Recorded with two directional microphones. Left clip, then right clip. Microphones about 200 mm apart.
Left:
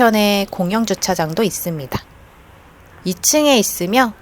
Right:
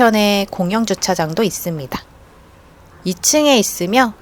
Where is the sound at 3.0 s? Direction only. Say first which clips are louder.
Right 1 dB; centre (ahead or behind).